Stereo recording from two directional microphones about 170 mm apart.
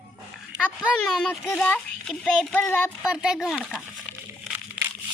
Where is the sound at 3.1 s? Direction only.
5° right (ahead or behind).